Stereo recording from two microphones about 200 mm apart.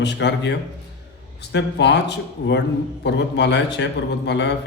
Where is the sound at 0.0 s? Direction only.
60° left (ahead or behind).